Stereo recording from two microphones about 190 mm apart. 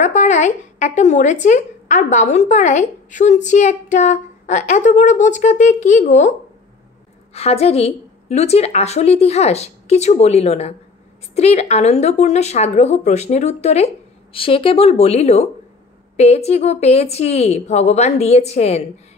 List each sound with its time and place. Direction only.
0.0 s speech: 40° left (ahead or behind)
7.3 s speech: 35° left (ahead or behind)